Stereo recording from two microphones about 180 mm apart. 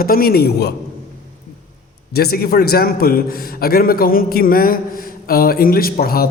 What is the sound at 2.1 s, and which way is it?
A man's voice, 60° left (ahead or behind).